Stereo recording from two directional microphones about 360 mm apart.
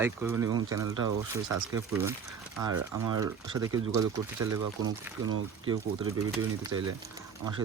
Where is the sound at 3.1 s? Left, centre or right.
Centre.